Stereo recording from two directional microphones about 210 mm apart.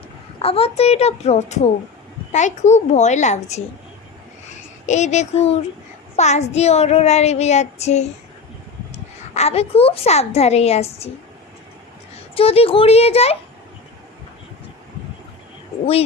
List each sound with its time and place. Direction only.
0.3 s a child's voice: 30° left (ahead or behind)
2.3 s child singing: 35° left (ahead or behind)
4.9 s child singing: 35° left (ahead or behind)
9.3 s child singing: 30° left (ahead or behind)
12.3 s a child's voice: 25° left (ahead or behind)